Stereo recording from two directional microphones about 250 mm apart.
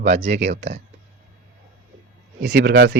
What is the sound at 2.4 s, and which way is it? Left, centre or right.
Speech, right.